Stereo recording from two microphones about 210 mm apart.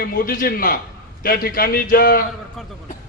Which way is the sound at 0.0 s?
45° left (ahead or behind).